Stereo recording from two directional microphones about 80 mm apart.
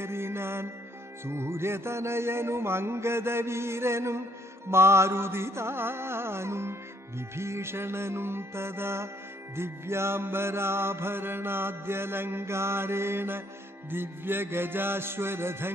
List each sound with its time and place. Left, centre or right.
0.0 s music: right